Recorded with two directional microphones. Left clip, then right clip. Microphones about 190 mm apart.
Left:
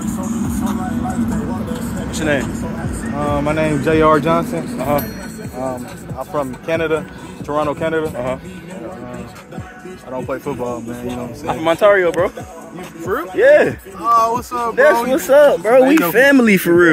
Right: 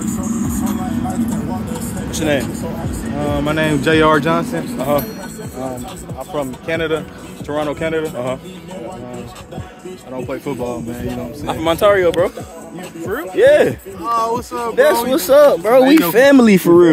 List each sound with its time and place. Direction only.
0.2 s vehicle: 25° right (ahead or behind)
1.7 s vehicle: 55° right (ahead or behind)
2.1 s speech: 15° right (ahead or behind)
3.2 s speech: 5° right (ahead or behind)
4.7 s speech: 10° right (ahead or behind)
6.1 s speech: 10° left (ahead or behind)
10.1 s speech: centre (ahead or behind)
13.0 s speech: centre (ahead or behind)
13.4 s speech: 10° right (ahead or behind)
14.0 s speech: 5° left (ahead or behind); by 16.9 s 15° right (ahead or behind)